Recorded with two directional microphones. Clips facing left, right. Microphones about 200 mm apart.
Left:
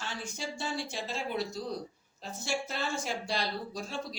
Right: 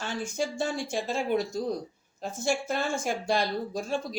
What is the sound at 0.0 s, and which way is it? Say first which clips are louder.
Speech: right 8 dB; 50° right (ahead or behind).